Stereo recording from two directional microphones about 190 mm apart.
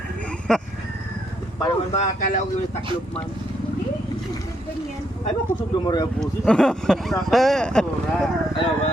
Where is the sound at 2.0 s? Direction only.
40° left (ahead or behind).